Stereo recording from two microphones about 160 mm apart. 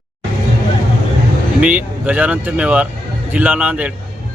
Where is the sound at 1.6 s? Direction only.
10° right (ahead or behind).